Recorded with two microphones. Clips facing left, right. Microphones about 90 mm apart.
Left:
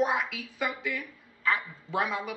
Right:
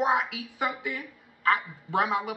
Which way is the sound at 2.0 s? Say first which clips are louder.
Right 4 dB; 20° right (ahead or behind).